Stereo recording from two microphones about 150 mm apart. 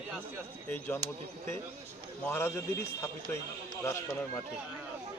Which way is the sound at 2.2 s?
15° left (ahead or behind).